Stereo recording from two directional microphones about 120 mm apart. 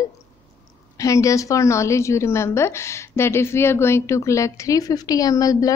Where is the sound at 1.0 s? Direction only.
25° left (ahead or behind).